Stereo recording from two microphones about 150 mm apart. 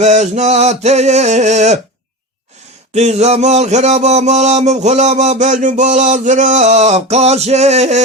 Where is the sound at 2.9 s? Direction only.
50° right (ahead or behind).